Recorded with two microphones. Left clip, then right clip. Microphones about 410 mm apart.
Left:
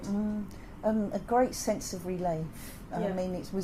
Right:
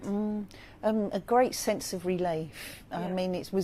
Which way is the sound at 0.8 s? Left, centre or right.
Right.